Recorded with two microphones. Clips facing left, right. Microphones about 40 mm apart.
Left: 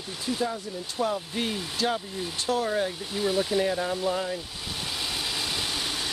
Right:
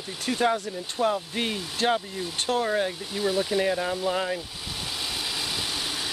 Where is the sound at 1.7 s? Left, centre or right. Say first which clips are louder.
Right 4 dB; right.